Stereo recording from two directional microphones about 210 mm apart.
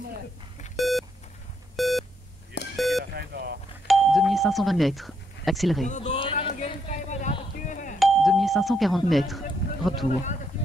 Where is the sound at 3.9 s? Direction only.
Centre (ahead or behind).